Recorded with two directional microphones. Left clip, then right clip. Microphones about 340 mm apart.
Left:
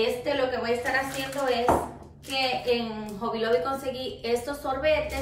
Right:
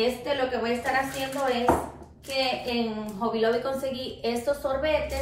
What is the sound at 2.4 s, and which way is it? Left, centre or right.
A woman's voice, centre.